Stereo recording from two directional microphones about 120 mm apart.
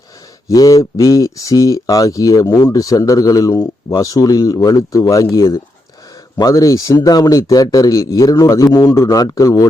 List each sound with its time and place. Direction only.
0.4 s a man's voice: 30° left (ahead or behind)